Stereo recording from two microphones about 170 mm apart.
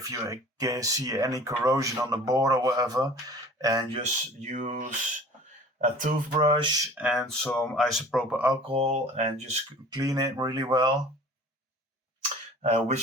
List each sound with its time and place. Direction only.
0.0 s speech: 20° right (ahead or behind)
3.9 s speech: 40° right (ahead or behind)
6.3 s speech: 35° right (ahead or behind)
6.9 s speech: 5° right (ahead or behind)
8.6 s speech: 35° right (ahead or behind)
9.9 s speech: 20° right (ahead or behind)
12.6 s speech: 40° right (ahead or behind)